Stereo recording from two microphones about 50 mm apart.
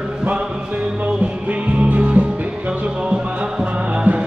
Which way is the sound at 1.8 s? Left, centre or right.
Right.